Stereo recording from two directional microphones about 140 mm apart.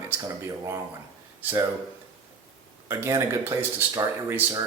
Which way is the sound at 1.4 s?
15° right (ahead or behind).